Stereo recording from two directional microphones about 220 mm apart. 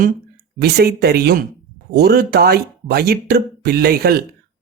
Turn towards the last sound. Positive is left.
turn(degrees=-45)  # may be behind; listen again after turning